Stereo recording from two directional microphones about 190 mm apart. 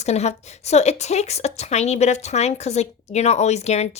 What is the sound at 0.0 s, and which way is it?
A woman's voice, 35° left (ahead or behind).